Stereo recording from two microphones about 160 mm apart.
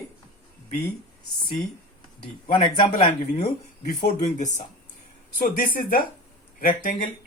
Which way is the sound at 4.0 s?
50° left (ahead or behind).